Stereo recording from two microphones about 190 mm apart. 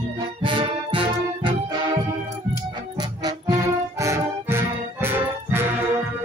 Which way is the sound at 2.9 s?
20° right (ahead or behind).